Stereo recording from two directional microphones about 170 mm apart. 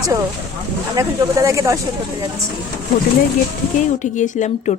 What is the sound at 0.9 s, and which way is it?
Speech, 20° right (ahead or behind).